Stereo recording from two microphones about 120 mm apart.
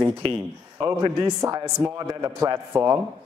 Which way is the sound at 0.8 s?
25° right (ahead or behind).